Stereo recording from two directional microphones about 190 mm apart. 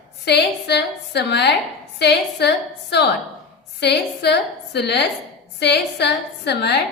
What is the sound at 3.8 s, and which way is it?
A woman's voice, 60° left (ahead or behind).